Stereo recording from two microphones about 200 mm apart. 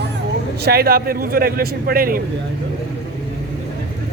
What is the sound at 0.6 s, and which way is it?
A man's voice, 50° right (ahead or behind).